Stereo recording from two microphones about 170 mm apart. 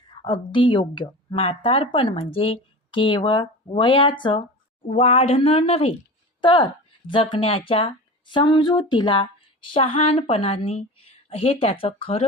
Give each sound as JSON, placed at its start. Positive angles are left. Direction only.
{"t": 0.3, "sound": "a woman's voice", "side_deg": 30}